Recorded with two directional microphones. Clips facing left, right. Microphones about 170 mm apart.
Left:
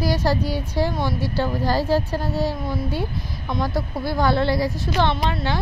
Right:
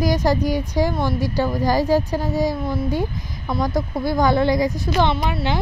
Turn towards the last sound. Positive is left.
turn(degrees=-15)  # may be behind; listen again after turning